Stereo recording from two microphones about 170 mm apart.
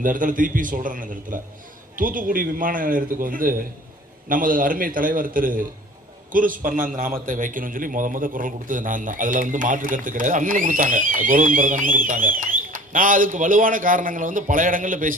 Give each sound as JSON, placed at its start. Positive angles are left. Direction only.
{"t": 0.0, "sound": "a man's voice", "side_deg": -50}